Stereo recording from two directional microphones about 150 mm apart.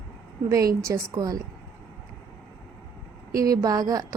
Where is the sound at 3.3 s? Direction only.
25° right (ahead or behind).